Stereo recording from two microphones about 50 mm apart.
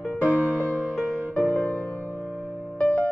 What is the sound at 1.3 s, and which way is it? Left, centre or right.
Music, left.